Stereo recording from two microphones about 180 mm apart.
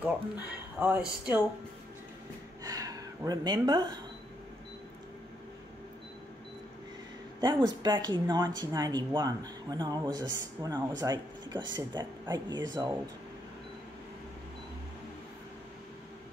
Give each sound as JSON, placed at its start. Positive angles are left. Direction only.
{"t": 0.0, "sound": "speech", "side_deg": -10}
{"t": 2.6, "sound": "a sound", "side_deg": -20}
{"t": 7.3, "sound": "speech", "side_deg": -20}